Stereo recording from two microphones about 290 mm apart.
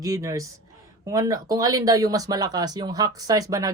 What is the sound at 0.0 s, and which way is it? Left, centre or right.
Speech, centre.